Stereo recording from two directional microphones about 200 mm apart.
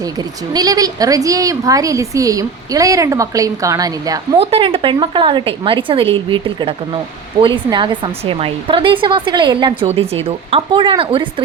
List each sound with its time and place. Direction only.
0.0 s a woman's voice: 20° right (ahead or behind)
4.4 s speech: 30° right (ahead or behind)